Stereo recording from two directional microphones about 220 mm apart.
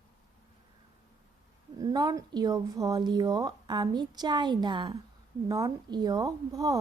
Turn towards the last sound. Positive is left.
turn(degrees=-15)  # may be behind; listen again after turning